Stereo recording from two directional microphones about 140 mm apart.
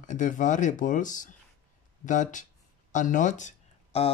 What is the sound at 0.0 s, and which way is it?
Speech, 65° left (ahead or behind).